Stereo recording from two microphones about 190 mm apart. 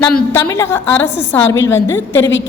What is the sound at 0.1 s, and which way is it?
A woman's voice, 15° left (ahead or behind).